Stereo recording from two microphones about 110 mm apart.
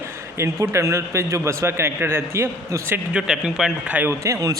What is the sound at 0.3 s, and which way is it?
A man's voice, 25° right (ahead or behind).